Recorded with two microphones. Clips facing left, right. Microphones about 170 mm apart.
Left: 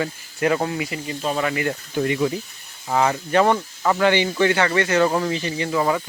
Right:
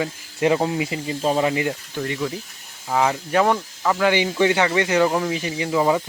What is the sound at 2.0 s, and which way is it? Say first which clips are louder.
Speech: left 7 dB; 15° left (ahead or behind).